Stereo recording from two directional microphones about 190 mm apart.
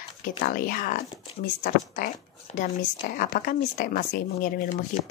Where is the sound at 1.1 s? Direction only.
35° left (ahead or behind).